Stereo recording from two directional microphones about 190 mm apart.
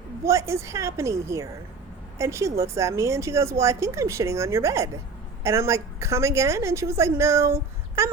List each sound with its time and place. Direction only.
0.3 s speech: 15° right (ahead or behind)